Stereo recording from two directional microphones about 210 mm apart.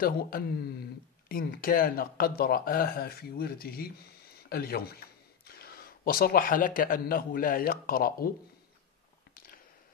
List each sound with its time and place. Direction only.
0.0 s speech: 45° left (ahead or behind)